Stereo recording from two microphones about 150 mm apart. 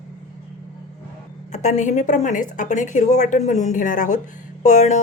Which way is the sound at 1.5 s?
50° left (ahead or behind).